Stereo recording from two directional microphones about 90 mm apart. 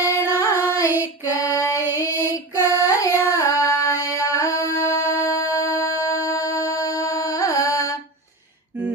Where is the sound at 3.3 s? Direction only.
35° left (ahead or behind).